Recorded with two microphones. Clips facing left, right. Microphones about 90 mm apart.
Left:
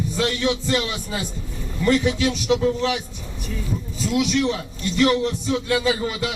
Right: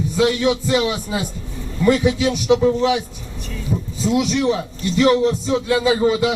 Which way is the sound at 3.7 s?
25° right (ahead or behind).